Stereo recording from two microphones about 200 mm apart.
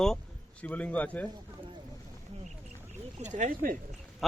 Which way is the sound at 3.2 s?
35° right (ahead or behind).